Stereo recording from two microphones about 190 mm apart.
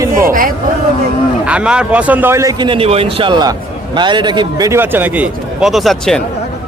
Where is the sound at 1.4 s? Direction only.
5° right (ahead or behind).